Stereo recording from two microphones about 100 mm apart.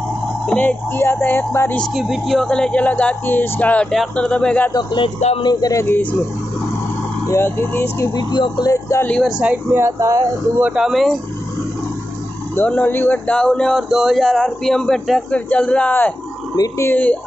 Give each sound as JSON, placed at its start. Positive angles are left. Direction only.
{"t": 0.5, "sound": "speech", "side_deg": 15}
{"t": 1.8, "sound": "speech", "side_deg": 0}
{"t": 3.9, "sound": "speech", "side_deg": 5}
{"t": 4.7, "sound": "speech", "side_deg": 50}
{"t": 5.4, "sound": "speech", "side_deg": 40}
{"t": 7.2, "sound": "speech", "side_deg": 25}
{"t": 8.2, "sound": "speech", "side_deg": 45}
{"t": 9.2, "sound": "speech", "side_deg": -10}
{"t": 9.8, "sound": "speech", "side_deg": -30}
{"t": 10.6, "sound": "speech", "side_deg": -5}
{"t": 12.5, "sound": "speech", "side_deg": 15}
{"t": 13.7, "sound": "speech", "side_deg": -5}
{"t": 16.5, "sound": "speech", "side_deg": 35}
{"t": 16.9, "sound": "speech", "side_deg": 15}